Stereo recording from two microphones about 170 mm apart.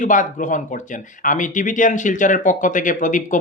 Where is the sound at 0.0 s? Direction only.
50° left (ahead or behind).